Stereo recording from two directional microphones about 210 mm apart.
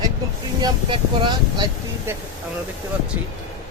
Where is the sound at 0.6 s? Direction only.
20° right (ahead or behind).